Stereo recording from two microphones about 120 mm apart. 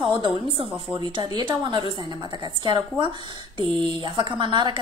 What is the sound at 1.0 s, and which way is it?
A woman's voice, 40° right (ahead or behind).